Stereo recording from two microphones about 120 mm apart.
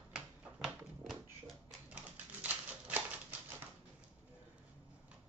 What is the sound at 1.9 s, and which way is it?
Typewriter, 10° right (ahead or behind).